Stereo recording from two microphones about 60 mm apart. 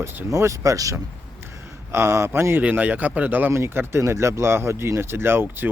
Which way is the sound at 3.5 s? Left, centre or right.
Right.